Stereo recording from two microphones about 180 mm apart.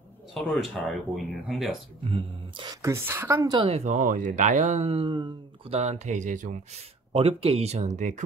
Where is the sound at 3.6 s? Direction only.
35° right (ahead or behind).